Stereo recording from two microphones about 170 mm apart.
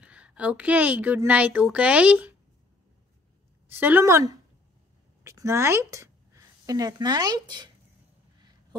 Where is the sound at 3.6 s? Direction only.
10° right (ahead or behind).